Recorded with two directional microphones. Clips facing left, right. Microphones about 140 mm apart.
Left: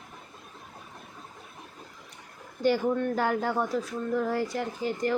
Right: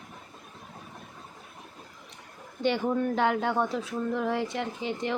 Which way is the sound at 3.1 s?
5° left (ahead or behind).